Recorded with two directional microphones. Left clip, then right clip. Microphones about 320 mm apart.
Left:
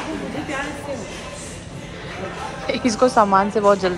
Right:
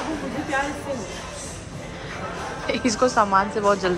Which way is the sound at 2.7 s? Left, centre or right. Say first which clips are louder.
Left 3 dB; centre.